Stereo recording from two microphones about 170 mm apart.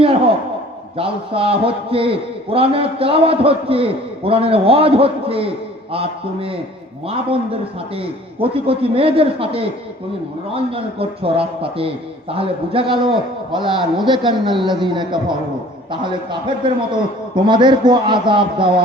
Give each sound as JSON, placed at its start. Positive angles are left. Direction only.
{"t": 0.9, "sound": "a man's voice", "side_deg": -30}